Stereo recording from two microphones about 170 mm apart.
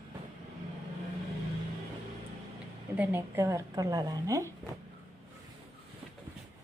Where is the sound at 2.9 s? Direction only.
10° right (ahead or behind).